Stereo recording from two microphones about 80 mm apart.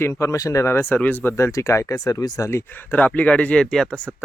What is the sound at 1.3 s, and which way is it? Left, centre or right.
Speech, left.